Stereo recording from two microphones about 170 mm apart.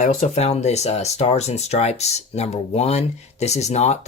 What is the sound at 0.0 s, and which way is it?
Speech, 45° left (ahead or behind).